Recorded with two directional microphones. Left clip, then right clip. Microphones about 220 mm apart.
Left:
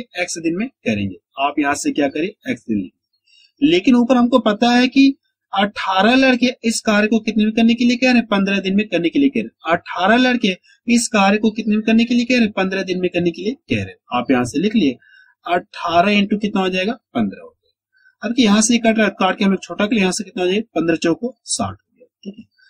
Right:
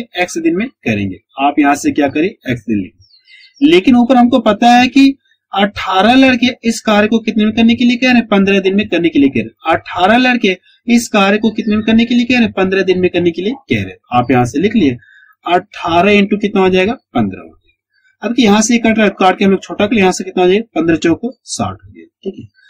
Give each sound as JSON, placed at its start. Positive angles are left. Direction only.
{"t": 0.1, "sound": "speech", "side_deg": 20}
{"t": 18.2, "sound": "speech", "side_deg": 20}